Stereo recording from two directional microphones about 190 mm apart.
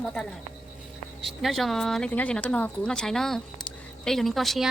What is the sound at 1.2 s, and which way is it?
Speech, centre (ahead or behind).